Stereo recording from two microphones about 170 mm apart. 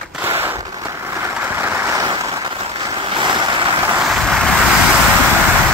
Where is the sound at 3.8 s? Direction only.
15° right (ahead or behind).